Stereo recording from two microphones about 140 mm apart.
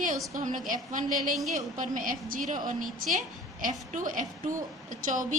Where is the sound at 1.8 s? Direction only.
70° right (ahead or behind).